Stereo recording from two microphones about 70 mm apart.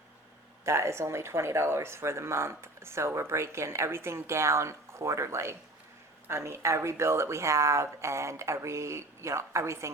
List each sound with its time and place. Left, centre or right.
0.6 s speech: right